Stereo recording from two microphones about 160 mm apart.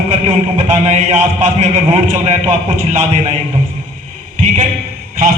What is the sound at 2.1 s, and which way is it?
Speech, 50° right (ahead or behind).